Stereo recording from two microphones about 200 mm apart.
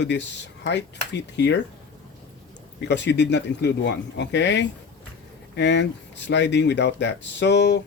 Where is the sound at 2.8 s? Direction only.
60° left (ahead or behind).